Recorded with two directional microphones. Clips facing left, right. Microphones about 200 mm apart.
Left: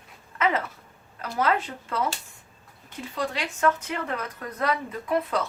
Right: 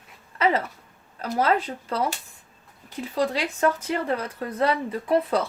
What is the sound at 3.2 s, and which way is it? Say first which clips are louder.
A woman's voice: right 4 dB; 35° right (ahead or behind).